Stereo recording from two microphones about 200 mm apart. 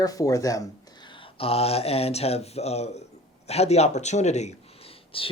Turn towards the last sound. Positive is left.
turn(degrees=25)  # may be behind; listen again after turning